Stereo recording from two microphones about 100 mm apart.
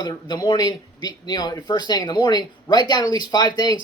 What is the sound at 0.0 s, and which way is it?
Speech, 45° left (ahead or behind).